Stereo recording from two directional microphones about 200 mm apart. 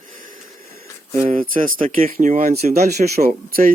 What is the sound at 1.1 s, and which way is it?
Speech, 30° right (ahead or behind).